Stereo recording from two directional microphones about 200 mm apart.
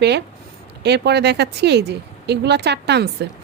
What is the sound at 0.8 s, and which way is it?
A woman's voice, 55° right (ahead or behind).